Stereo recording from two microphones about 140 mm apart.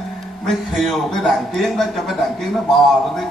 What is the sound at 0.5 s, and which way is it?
A man's voice, centre (ahead or behind).